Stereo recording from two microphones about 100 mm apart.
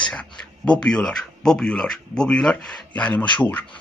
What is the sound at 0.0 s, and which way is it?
Speech, 10° left (ahead or behind).